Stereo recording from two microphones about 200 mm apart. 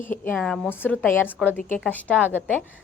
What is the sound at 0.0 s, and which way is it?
A woman's voice, 10° left (ahead or behind).